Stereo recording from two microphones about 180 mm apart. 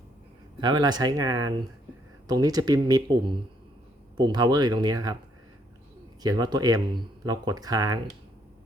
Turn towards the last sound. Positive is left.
turn(degrees=-20)  # may be behind; listen again after turning